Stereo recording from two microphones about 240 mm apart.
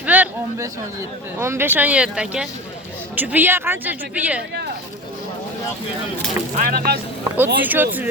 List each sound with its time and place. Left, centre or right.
0.0 s a sound: centre
1.4 s a woman's voice: centre
6.6 s speech: right
7.3 s a woman's voice: centre